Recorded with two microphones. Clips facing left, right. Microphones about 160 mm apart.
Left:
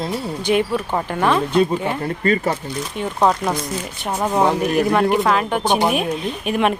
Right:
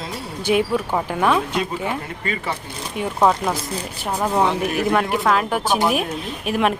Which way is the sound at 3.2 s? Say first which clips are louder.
Even; 5° right (ahead or behind).